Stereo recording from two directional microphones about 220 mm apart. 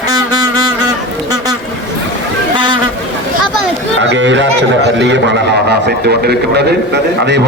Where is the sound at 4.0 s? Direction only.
55° right (ahead or behind).